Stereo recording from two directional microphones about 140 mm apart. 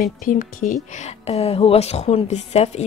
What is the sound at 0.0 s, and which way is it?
A woman's voice, 75° left (ahead or behind).